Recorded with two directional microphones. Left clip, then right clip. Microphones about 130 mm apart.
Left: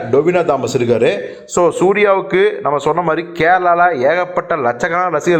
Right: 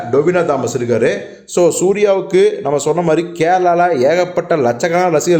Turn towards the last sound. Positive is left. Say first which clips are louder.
# right 2 dB
turn(degrees=-30)  # may be behind; listen again after turning